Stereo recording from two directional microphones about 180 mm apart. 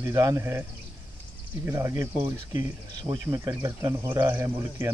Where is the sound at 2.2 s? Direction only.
25° right (ahead or behind).